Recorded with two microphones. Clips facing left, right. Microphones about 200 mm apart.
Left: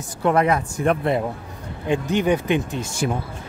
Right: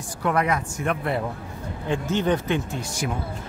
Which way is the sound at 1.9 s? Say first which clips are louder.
Left 3 dB; 15° left (ahead or behind).